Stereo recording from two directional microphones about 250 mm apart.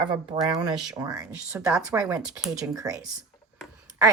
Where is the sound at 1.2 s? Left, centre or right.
Centre.